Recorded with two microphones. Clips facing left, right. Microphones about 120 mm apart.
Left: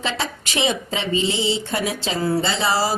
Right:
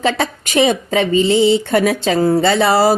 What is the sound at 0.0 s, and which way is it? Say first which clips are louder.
A woman's voice: right 8 dB; 50° right (ahead or behind).